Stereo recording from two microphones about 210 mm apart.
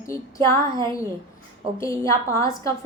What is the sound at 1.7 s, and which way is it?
A woman's voice, 15° left (ahead or behind).